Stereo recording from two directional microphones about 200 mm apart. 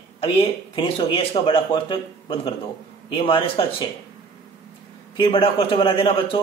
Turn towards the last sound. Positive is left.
turn(degrees=25)  # may be behind; listen again after turning